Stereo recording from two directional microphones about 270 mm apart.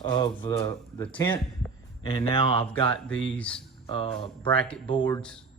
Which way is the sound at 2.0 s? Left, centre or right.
Centre.